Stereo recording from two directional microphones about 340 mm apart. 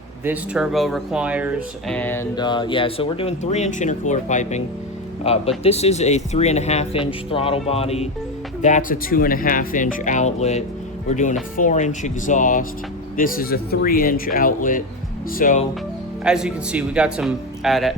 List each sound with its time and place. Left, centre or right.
0.3 s speech: centre; by 15.6 s left
16.2 s speech: centre